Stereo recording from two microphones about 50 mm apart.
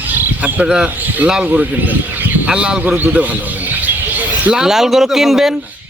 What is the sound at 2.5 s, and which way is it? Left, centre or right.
Speech, right.